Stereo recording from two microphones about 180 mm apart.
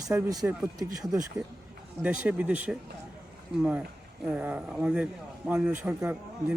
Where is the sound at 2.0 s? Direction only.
5° right (ahead or behind).